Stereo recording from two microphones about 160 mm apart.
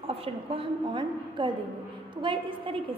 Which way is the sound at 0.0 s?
35° right (ahead or behind).